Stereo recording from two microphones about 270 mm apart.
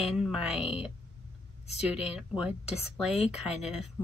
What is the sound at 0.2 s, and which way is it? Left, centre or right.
Speech, centre.